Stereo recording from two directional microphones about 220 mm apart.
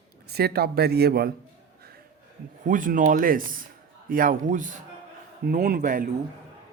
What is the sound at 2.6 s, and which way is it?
Speech, 35° right (ahead or behind).